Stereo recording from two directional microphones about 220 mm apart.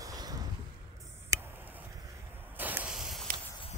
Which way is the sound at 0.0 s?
15° right (ahead or behind).